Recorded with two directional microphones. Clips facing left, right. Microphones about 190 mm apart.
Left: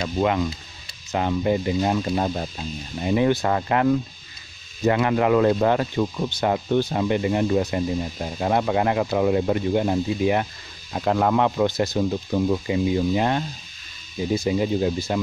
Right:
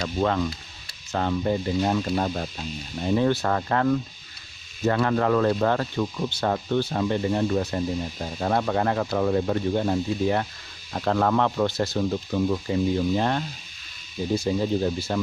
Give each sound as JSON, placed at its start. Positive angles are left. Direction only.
{"t": 0.0, "sound": "speech", "side_deg": 10}